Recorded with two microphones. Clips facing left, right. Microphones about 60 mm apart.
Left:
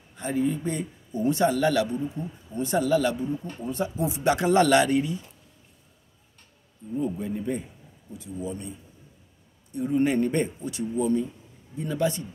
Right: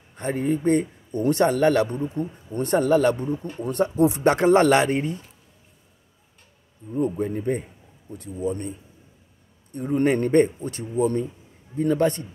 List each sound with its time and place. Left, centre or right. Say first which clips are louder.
0.1 s a man's voice: right 2 dB; right
2.0 s a man's voice: right 4 dB; right
7.0 s a man's voice: right 5 dB; right